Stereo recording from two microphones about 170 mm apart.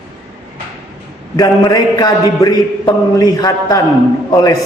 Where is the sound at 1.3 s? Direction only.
20° left (ahead or behind).